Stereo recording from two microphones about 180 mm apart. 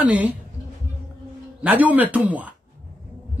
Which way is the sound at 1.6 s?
10° right (ahead or behind).